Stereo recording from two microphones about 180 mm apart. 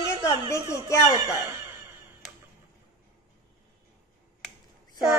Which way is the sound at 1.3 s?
10° right (ahead or behind).